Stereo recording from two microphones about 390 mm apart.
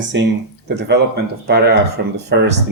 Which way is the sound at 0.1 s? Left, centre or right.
Right.